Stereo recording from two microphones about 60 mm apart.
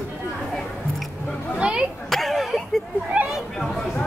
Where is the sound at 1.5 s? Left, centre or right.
Centre.